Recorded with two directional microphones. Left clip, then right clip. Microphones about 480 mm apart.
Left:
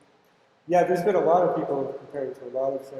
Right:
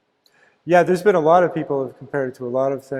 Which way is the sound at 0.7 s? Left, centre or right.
Right.